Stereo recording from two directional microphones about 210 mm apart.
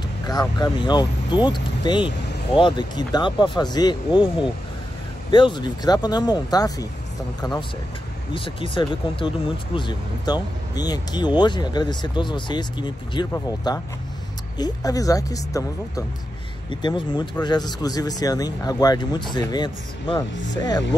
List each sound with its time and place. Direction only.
0.3 s speech: 20° left (ahead or behind)
8.3 s a woman's voice: 25° left (ahead or behind)
16.8 s speech: 20° left (ahead or behind)